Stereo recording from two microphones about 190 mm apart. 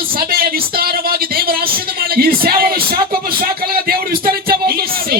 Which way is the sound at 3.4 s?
50° right (ahead or behind).